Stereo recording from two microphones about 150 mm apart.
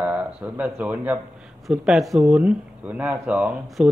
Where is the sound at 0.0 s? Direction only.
10° right (ahead or behind).